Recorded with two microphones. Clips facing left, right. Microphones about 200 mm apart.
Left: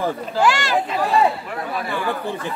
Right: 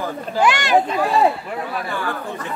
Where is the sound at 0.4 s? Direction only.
20° right (ahead or behind).